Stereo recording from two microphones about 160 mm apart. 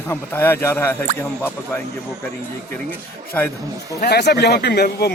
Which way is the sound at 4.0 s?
90° left.